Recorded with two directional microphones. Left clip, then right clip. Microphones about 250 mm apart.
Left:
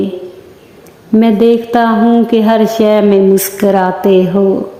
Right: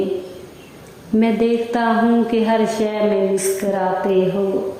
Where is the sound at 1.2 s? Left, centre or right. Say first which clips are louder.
Left 8 dB; left.